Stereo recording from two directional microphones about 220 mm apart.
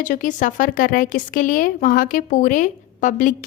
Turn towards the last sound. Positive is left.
turn(degrees=35)  # may be behind; listen again after turning